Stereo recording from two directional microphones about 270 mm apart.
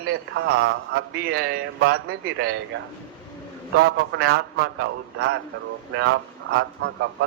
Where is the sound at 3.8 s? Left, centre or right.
Right.